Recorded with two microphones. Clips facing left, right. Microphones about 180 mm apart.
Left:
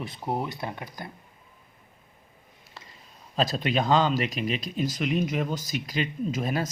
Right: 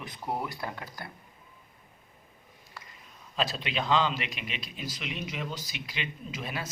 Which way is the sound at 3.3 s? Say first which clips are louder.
Left 6 dB; 40° left (ahead or behind).